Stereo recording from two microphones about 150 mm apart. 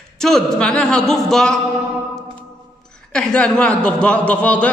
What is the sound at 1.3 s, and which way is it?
Speech, 5° left (ahead or behind).